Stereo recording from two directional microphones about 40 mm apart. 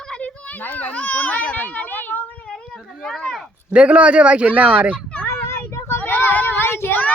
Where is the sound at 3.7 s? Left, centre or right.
Right.